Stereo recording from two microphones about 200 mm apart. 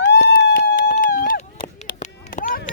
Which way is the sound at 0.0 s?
60° left (ahead or behind).